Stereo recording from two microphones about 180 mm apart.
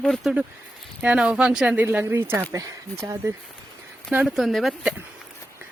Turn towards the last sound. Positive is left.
turn(degrees=0)  # may be behind; listen again after turning